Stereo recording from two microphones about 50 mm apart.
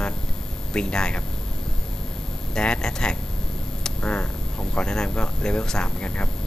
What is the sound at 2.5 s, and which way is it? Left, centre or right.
Speech, centre.